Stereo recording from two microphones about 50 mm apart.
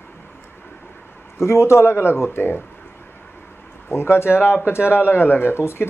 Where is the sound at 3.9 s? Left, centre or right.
Left.